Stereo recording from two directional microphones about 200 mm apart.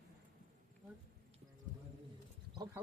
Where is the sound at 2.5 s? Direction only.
20° right (ahead or behind).